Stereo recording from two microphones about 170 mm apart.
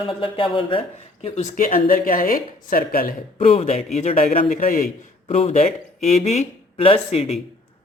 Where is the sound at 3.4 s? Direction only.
40° left (ahead or behind).